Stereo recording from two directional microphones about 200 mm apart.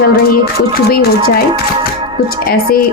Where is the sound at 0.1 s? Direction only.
50° left (ahead or behind).